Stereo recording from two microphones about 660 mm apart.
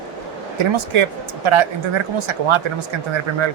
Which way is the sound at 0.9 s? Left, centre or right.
Right.